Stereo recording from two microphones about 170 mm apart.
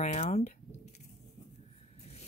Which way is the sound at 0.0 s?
40° left (ahead or behind).